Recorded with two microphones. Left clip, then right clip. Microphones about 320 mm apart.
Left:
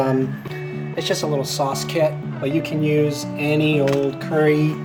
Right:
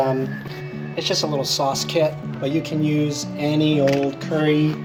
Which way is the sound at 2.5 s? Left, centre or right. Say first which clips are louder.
Left 3 dB; centre.